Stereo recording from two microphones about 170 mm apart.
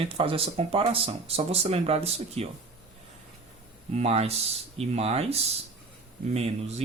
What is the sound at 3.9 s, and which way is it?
Speech, 40° right (ahead or behind).